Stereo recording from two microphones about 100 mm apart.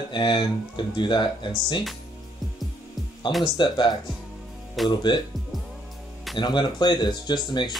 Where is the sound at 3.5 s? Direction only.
50° left (ahead or behind).